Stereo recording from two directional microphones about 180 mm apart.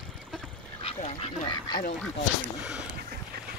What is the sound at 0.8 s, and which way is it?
Speech, 35° left (ahead or behind).